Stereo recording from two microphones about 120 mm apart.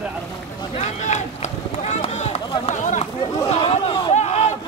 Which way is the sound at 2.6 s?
90° left.